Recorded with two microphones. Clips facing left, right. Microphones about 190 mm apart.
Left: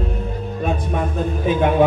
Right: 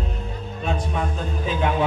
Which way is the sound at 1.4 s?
55° left (ahead or behind).